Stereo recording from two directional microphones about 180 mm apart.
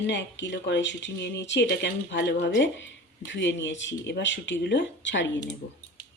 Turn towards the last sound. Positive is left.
turn(degrees=90)